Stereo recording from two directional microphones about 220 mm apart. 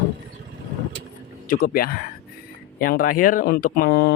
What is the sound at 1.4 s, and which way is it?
Speech, 40° left (ahead or behind).